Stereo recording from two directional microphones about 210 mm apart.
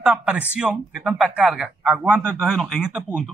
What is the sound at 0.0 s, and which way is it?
Speech, 5° right (ahead or behind).